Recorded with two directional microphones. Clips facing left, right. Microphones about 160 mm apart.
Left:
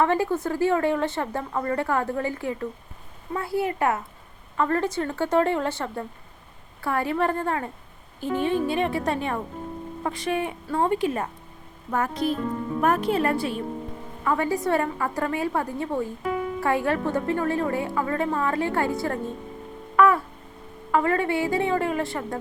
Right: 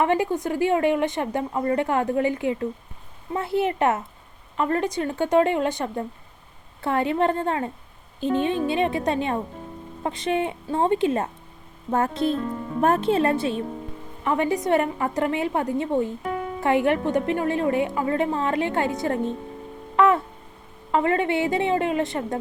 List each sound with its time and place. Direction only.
0.0 s a woman's voice: 20° right (ahead or behind)